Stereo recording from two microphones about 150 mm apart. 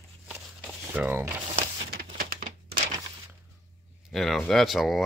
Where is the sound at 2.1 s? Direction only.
75° right (ahead or behind).